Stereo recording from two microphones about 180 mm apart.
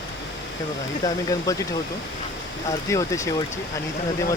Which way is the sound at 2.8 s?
15° left (ahead or behind).